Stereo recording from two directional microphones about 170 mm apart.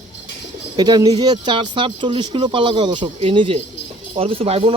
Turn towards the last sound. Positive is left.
turn(degrees=-35)  # may be behind; listen again after turning